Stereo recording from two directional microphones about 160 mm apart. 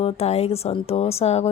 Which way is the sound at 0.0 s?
40° left (ahead or behind).